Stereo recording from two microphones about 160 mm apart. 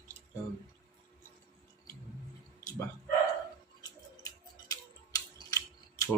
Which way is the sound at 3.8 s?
20° left (ahead or behind).